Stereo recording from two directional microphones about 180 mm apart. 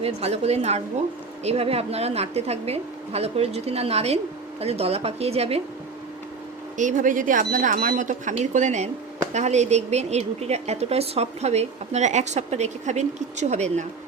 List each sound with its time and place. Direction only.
0.0 s a woman's voice: 35° right (ahead or behind)
6.7 s a woman's voice: 45° right (ahead or behind)